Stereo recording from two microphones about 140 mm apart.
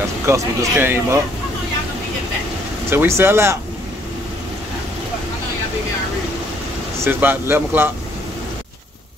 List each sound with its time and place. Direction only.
0.3 s speech: 15° right (ahead or behind)
2.9 s a man's voice: 15° right (ahead or behind)
7.1 s a man's voice: 15° right (ahead or behind)